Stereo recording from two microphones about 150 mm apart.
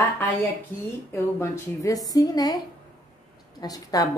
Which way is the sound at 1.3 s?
15° left (ahead or behind).